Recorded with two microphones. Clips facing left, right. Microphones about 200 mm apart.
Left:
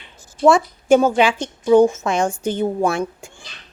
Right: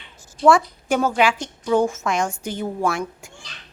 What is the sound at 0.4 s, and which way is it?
A woman's voice, 20° left (ahead or behind).